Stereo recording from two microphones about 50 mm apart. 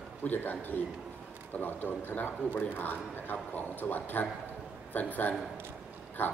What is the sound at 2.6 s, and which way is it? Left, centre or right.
A man's voice, left.